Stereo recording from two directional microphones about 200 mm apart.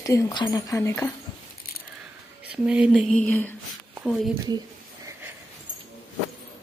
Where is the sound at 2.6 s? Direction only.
5° right (ahead or behind).